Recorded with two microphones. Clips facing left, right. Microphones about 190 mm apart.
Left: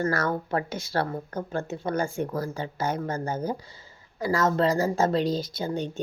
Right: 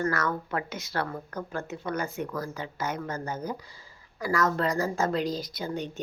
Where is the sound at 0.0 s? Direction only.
30° left (ahead or behind).